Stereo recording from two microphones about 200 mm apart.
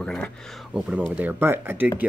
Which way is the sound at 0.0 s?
5° left (ahead or behind).